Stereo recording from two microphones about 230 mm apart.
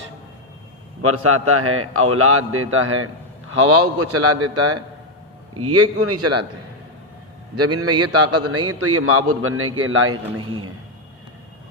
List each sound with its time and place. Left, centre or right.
1.0 s a man's voice: right
5.5 s a man's voice: right
7.5 s a man's voice: right